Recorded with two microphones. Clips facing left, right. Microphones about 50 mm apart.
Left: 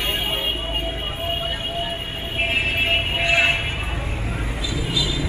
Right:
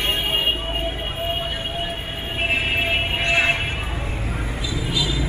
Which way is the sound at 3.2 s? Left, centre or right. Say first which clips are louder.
Left 1 dB; centre.